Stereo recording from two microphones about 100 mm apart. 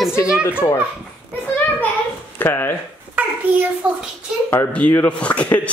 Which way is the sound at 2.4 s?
20° left (ahead or behind).